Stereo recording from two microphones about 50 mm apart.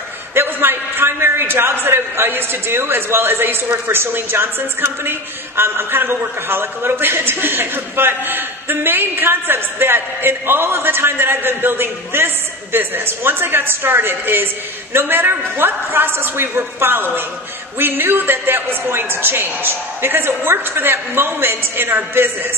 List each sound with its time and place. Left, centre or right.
0.3 s a man's voice: right